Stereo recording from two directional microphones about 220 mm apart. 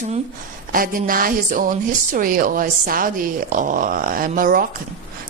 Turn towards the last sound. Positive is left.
turn(degrees=-40)  # may be behind; listen again after turning